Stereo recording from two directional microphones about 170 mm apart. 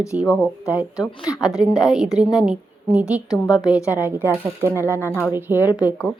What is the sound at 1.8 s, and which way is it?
A woman's voice, 5° right (ahead or behind).